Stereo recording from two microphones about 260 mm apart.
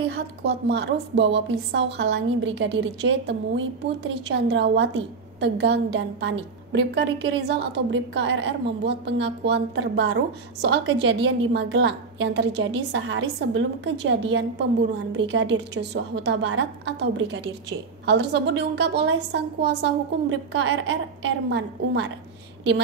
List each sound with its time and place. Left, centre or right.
0.0 s a woman's voice: right